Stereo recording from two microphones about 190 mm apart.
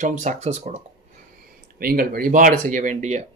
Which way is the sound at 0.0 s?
40° right (ahead or behind).